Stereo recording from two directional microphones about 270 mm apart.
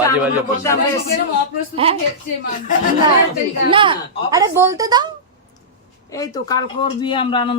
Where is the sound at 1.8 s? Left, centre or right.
Right.